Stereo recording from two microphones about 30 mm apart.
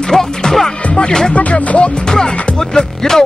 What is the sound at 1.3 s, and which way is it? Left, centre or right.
Speech, left.